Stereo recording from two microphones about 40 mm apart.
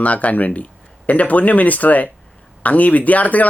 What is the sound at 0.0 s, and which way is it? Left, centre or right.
Speech, left.